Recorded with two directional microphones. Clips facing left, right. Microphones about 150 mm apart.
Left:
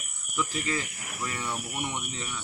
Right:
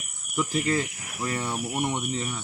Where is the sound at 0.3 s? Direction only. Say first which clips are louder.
Right 5 dB; 35° right (ahead or behind).